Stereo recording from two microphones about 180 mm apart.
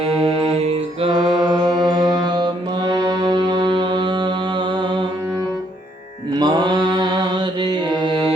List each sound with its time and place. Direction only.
0.0 s music: 30° right (ahead or behind)
6.3 s mantra: 25° right (ahead or behind)